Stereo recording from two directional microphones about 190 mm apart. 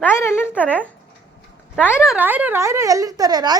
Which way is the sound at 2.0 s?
5° right (ahead or behind).